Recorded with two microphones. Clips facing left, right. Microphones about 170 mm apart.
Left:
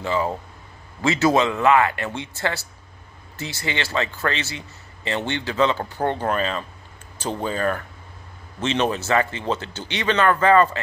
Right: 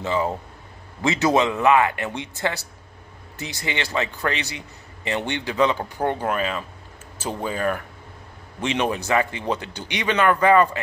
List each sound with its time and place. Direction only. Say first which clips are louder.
0.0 s a man's voice: even; 20° right (ahead or behind)